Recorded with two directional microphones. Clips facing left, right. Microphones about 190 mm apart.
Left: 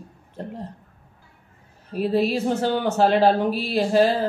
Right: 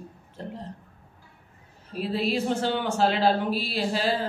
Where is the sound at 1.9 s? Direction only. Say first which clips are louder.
Left 5 dB; 45° left (ahead or behind).